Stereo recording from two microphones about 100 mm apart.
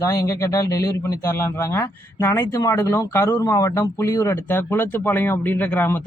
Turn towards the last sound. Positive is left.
turn(degrees=20)  # may be behind; listen again after turning